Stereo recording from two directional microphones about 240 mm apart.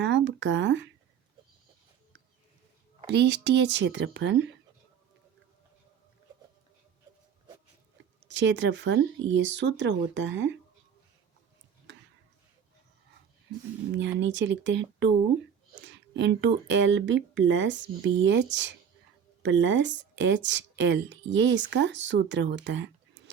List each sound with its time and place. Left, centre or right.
0.0 s speech: right
3.1 s speech: right
8.3 s speech: right
13.9 s speech: right